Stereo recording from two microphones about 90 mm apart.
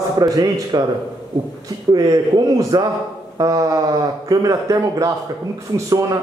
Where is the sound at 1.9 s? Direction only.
45° right (ahead or behind).